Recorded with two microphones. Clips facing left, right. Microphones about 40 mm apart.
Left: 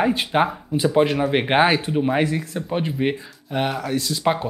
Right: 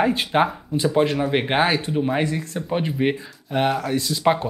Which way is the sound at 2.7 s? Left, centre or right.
Centre.